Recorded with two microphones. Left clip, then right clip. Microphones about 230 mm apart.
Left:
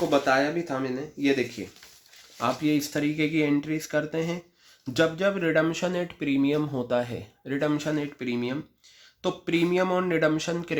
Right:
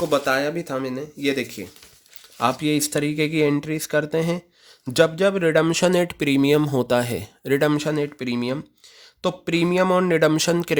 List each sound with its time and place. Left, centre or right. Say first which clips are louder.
0.1 s speech: even; right